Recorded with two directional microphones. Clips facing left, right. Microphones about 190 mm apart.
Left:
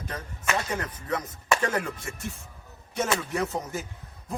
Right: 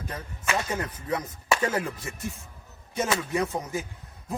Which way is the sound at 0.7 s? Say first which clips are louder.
Right 1 dB; 5° right (ahead or behind).